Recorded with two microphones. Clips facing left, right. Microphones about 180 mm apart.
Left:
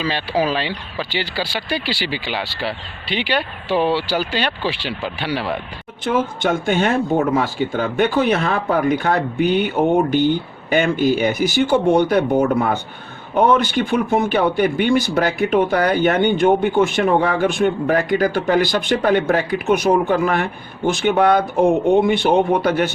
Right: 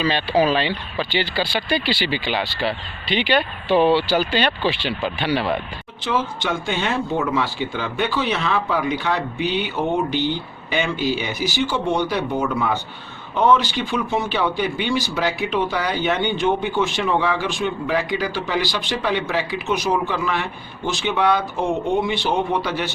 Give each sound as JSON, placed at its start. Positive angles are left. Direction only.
{"t": 0.0, "sound": "speech", "side_deg": 10}
{"t": 6.1, "sound": "speech", "side_deg": 50}